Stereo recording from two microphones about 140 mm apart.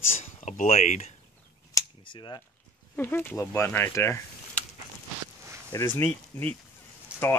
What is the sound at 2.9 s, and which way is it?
Speech, 15° left (ahead or behind).